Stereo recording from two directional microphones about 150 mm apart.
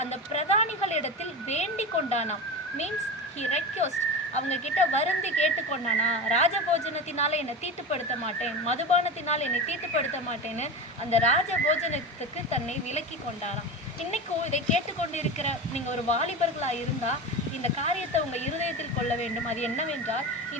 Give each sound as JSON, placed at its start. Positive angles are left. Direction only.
{"t": 0.0, "sound": "a woman's voice", "side_deg": 45}
{"t": 3.4, "sound": "a woman's voice", "side_deg": 50}
{"t": 11.1, "sound": "a woman's voice", "side_deg": 50}